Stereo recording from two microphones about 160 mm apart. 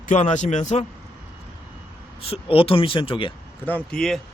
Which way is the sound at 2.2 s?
35° left (ahead or behind).